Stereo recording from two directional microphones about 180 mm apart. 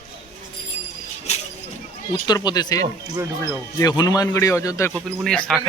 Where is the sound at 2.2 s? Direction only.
20° left (ahead or behind).